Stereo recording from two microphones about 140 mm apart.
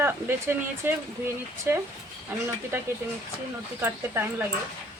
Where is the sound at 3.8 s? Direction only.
15° right (ahead or behind).